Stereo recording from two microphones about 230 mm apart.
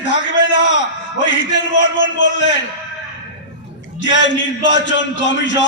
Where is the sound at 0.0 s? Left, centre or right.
Left.